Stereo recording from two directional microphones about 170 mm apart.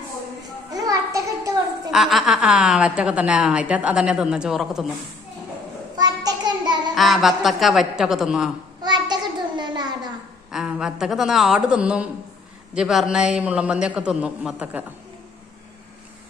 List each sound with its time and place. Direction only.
0.7 s a sound: 20° right (ahead or behind)
1.9 s a woman's voice: centre (ahead or behind)
6.0 s child singing: 25° right (ahead or behind)
6.9 s a woman's voice: centre (ahead or behind)
8.8 s child singing: 25° right (ahead or behind)
9.6 s a sound: 25° right (ahead or behind)
10.5 s a woman's voice: 5° right (ahead or behind)